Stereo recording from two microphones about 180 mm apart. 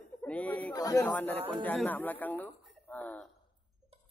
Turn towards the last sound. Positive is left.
turn(degrees=5)  # may be behind; listen again after turning